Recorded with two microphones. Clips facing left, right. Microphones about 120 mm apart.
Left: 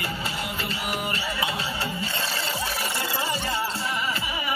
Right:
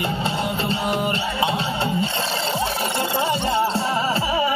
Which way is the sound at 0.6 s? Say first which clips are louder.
Right 7 dB; 25° right (ahead or behind).